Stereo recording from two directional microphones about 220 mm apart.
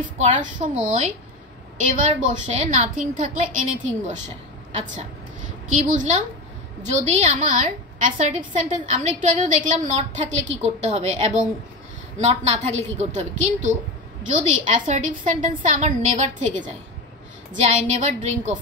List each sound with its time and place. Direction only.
0.2 s a woman's voice: 35° right (ahead or behind)
1.9 s a woman's voice: 35° right (ahead or behind)
5.7 s a woman's voice: 35° right (ahead or behind)